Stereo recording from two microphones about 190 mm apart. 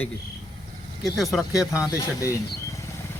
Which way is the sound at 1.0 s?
Centre (ahead or behind).